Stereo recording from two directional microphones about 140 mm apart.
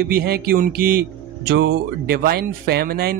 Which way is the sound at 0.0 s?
90° right.